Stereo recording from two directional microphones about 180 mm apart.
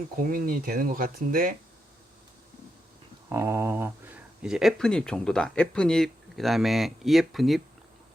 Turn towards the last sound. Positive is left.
turn(degrees=0)  # may be behind; listen again after turning